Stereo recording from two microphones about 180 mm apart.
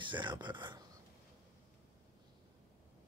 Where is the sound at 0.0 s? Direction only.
25° right (ahead or behind).